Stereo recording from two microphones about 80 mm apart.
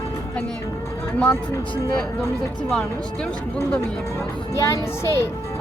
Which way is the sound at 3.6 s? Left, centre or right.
Left.